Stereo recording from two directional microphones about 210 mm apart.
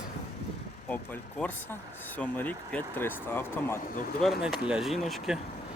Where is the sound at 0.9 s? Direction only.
10° left (ahead or behind).